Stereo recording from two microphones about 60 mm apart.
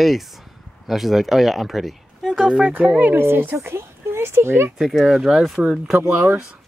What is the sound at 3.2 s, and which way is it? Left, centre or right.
Speech, right.